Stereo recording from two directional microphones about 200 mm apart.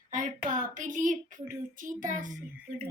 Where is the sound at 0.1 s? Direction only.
40° right (ahead or behind).